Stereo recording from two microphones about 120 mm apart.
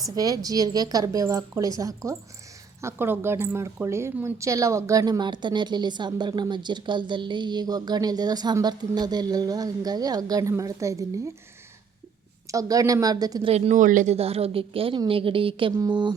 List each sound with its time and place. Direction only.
0.2 s a woman's voice: 30° right (ahead or behind)
12.5 s a woman's voice: 30° right (ahead or behind)
13.4 s a woman's voice: 65° right (ahead or behind); by 15.7 s 45° right (ahead or behind)
15.7 s a woman's voice: 35° right (ahead or behind)